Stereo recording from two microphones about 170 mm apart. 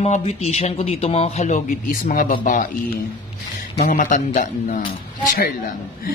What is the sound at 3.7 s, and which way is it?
Speech, 50° left (ahead or behind).